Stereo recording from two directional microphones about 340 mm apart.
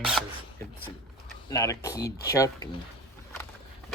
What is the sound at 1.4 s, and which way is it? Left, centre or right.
Speech, centre.